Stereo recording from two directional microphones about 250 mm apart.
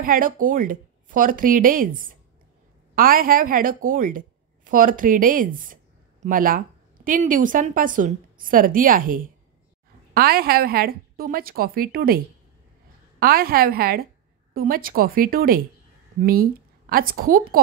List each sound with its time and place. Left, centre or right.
0.0 s a woman's voice: right
13.2 s a woman's voice: right